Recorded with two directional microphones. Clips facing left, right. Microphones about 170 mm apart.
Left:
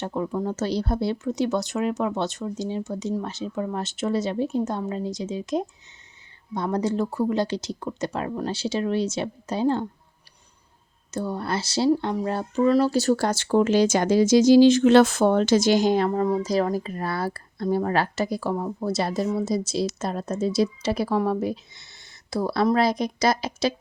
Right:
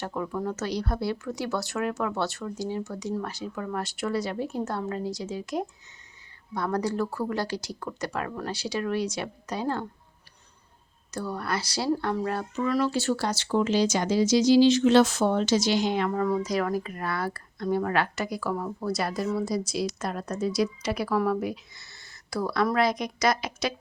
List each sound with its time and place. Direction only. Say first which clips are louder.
0.0 s speech: left 4 dB; 25° left (ahead or behind)
11.1 s speech: left 3 dB; 25° left (ahead or behind)